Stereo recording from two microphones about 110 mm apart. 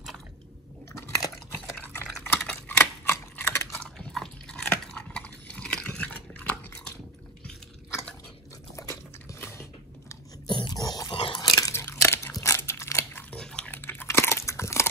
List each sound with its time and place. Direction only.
1.0 s chewing: 30° left (ahead or behind)
1.8 s typing: 20° left (ahead or behind)
2.2 s a sound: 20° left (ahead or behind)
3.8 s biting: 5° left (ahead or behind)
4.6 s chewing: 10° left (ahead or behind)
8.7 s biting: 25° left (ahead or behind)
10.4 s dog: 45° left (ahead or behind)
11.1 s biting: 55° left (ahead or behind)
11.4 s biting: 30° left (ahead or behind)
11.8 s crunch: 25° left (ahead or behind)
13.3 s biting: 5° left (ahead or behind)
13.7 s chewing: 20° left (ahead or behind)